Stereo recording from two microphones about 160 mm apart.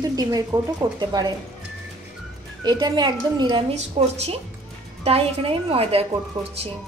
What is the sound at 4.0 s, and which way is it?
A woman's voice, 45° right (ahead or behind).